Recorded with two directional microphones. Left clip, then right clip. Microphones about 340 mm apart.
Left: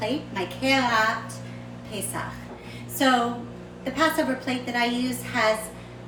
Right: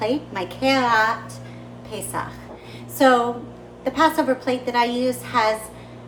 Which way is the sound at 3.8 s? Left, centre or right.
Centre.